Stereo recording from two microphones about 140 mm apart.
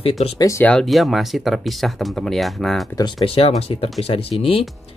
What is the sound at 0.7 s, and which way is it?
Speech, centre (ahead or behind).